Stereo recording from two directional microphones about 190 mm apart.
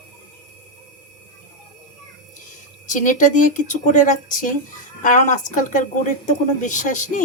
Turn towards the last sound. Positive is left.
turn(degrees=40)  # may be behind; listen again after turning